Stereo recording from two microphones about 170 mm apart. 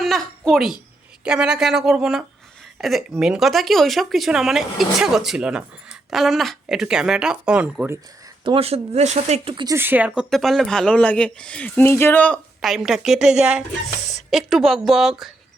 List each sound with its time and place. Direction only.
0.0 s a sound: centre (ahead or behind)
1.2 s a woman's voice: 5° right (ahead or behind)
8.4 s speech: 35° right (ahead or behind)
9.6 s a woman's voice: 15° right (ahead or behind)